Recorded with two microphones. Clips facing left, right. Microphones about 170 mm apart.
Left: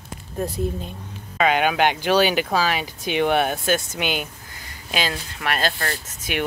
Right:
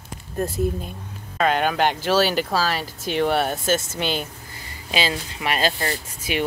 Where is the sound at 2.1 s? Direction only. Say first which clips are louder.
Left 1 dB; 15° left (ahead or behind).